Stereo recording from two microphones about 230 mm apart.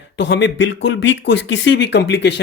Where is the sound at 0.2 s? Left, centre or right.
Left.